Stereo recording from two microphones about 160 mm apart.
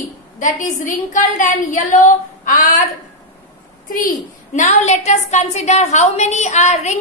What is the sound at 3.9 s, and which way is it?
A woman's voice, 60° left (ahead or behind).